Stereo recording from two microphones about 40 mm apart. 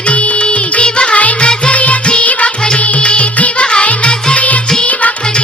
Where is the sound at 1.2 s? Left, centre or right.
Left.